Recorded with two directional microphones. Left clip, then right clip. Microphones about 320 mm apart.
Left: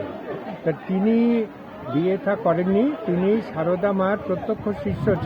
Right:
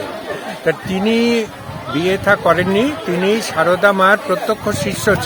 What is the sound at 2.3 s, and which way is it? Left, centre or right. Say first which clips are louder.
Speech: right 12 dB; right.